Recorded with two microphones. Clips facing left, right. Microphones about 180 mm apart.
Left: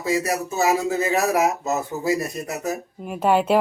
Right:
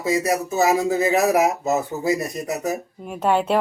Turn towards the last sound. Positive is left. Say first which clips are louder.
# left 1 dB
turn(degrees=5)  # may be behind; listen again after turning